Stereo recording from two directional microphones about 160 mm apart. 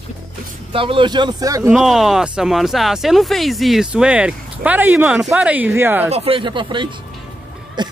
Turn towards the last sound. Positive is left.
turn(degrees=-25)  # may be behind; listen again after turning